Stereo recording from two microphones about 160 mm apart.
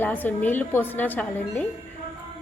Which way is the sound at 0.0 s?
10° left (ahead or behind).